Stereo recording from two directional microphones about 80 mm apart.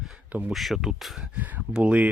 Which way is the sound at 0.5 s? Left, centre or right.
Centre.